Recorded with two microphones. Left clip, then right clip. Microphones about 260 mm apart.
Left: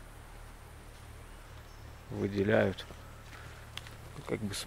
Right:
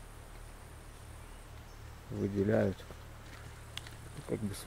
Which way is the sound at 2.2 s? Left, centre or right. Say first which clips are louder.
Left 3 dB; centre.